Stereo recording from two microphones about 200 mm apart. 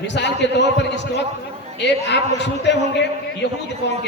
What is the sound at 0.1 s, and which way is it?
A man's voice, 60° left (ahead or behind).